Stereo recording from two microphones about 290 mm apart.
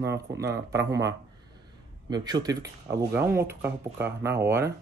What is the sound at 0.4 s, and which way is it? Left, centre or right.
Speech, centre.